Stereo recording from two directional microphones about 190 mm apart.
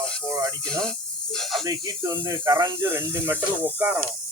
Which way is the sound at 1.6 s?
20° right (ahead or behind).